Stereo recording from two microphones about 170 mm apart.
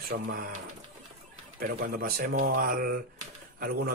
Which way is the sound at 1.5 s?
60° right (ahead or behind).